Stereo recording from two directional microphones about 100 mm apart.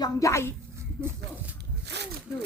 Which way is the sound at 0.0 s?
30° left (ahead or behind).